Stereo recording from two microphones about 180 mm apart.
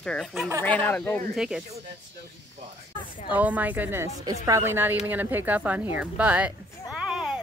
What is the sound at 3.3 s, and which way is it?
Speech, 10° right (ahead or behind).